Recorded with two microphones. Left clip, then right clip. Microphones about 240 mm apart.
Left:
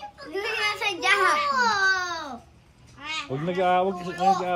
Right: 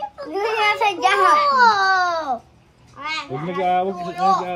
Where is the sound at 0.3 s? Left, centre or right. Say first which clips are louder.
Right 7 dB; centre.